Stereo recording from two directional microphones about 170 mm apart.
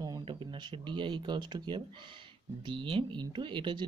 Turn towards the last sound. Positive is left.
turn(degrees=-30)  # may be behind; listen again after turning